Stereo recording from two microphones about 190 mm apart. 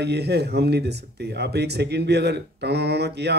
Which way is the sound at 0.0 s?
60° right (ahead or behind).